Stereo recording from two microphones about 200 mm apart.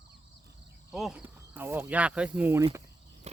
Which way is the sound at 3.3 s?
35° right (ahead or behind).